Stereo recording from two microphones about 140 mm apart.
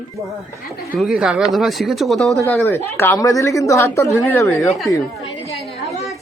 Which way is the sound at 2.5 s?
15° left (ahead or behind).